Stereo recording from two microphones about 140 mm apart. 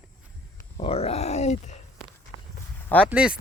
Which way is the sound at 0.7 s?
45° left (ahead or behind).